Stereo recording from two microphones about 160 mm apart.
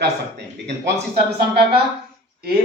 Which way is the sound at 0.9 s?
70° right (ahead or behind).